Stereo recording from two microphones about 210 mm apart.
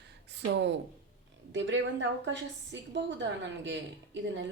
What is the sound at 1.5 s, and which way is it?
A woman's voice, 60° right (ahead or behind).